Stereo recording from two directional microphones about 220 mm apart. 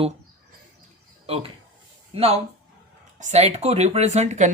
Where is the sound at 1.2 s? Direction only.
25° right (ahead or behind).